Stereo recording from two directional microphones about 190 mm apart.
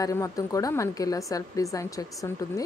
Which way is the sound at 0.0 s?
15° left (ahead or behind).